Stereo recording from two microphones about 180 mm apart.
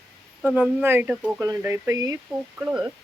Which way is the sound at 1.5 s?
15° right (ahead or behind).